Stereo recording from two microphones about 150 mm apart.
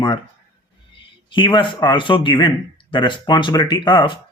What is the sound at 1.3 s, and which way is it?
A man's voice, 30° left (ahead or behind).